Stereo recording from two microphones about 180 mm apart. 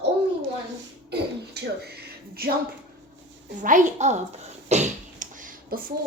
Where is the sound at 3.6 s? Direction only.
45° right (ahead or behind).